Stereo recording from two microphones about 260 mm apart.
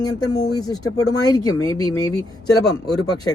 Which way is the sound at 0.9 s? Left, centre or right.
Left.